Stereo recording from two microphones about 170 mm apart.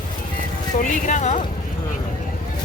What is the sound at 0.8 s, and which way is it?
Speech, 45° left (ahead or behind).